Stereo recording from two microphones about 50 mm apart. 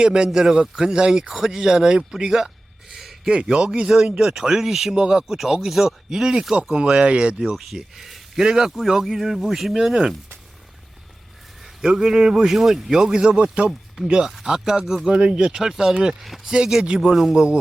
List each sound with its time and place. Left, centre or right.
0.0 s a man's voice: centre
2.9 s a sound: centre
3.8 s a man's voice: centre
7.5 s a man's voice: centre
11.9 s a man's voice: centre
14.3 s a man's voice: centre
16.5 s a man's voice: centre